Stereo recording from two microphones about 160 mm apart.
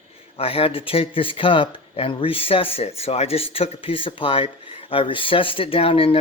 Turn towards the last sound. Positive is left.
turn(degrees=35)  # may be behind; listen again after turning